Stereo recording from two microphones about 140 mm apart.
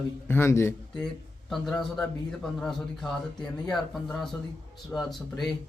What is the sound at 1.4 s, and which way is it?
Speech, centre (ahead or behind).